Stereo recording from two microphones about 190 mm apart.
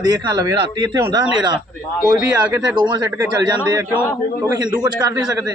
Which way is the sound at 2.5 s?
20° right (ahead or behind).